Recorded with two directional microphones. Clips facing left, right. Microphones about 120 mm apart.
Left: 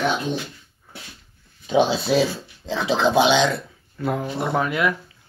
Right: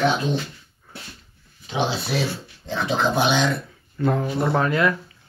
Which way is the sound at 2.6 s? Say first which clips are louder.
Left 2 dB; 90° left.